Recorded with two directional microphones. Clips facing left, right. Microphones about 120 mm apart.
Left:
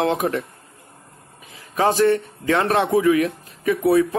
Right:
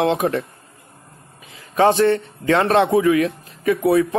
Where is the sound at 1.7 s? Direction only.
25° right (ahead or behind).